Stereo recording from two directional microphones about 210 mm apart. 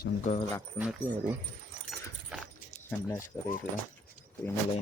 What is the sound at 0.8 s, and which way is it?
Speech, 5° right (ahead or behind).